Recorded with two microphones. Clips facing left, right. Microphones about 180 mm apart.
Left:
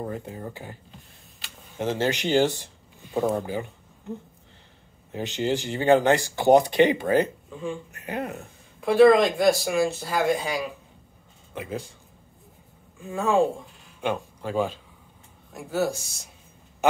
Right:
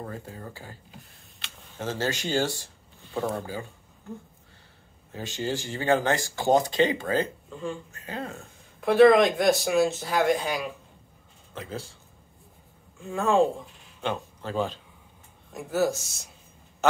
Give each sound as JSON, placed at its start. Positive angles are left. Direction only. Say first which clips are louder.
{"t": 0.0, "sound": "speech", "louder": "left 5 dB", "side_deg": 20}
{"t": 1.8, "sound": "speech", "louder": "left 4 dB", "side_deg": 15}
{"t": 5.1, "sound": "speech", "louder": "left 5 dB", "side_deg": 20}
{"t": 7.5, "sound": "speech", "louder": "left 1 dB", "side_deg": 0}
{"t": 7.9, "sound": "speech", "louder": "left 4 dB", "side_deg": 20}
{"t": 8.8, "sound": "speech", "louder": "left 1 dB", "side_deg": 0}
{"t": 11.5, "sound": "speech", "louder": "left 4 dB", "side_deg": 15}
{"t": 13.0, "sound": "speech", "louder": "even", "side_deg": 5}
{"t": 15.5, "sound": "speech", "louder": "right 1 dB", "side_deg": 0}